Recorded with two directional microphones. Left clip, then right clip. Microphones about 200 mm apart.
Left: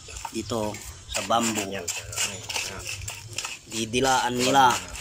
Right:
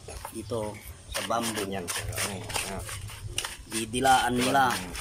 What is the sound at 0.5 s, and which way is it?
Speech, 15° left (ahead or behind).